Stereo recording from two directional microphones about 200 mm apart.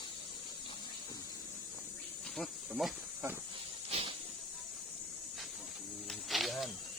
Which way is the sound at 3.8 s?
30° right (ahead or behind).